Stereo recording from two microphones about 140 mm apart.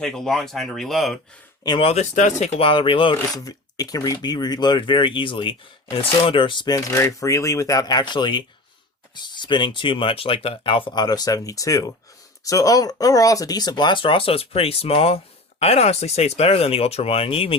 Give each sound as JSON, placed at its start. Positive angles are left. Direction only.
{"t": 0.0, "sound": "speech", "side_deg": 5}
{"t": 1.6, "sound": "speech", "side_deg": 30}
{"t": 1.9, "sound": "speech", "side_deg": 60}
{"t": 2.6, "sound": "speech", "side_deg": 40}
{"t": 3.2, "sound": "speech", "side_deg": 25}